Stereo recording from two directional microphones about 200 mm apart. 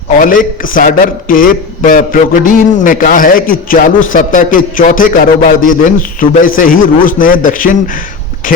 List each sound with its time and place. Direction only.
0.2 s a man's voice: 45° left (ahead or behind)